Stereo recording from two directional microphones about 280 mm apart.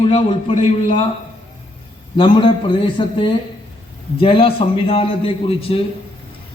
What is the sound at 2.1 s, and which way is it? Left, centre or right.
A man's voice, centre.